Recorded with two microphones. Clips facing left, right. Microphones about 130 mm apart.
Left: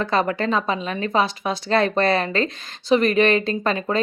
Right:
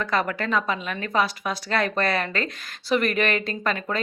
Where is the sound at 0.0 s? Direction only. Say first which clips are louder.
Left 4 dB; 25° left (ahead or behind).